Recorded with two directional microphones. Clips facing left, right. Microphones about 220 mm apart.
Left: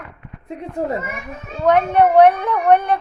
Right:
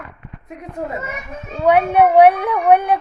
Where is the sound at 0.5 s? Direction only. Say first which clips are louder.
Left 4 dB; 30° left (ahead or behind).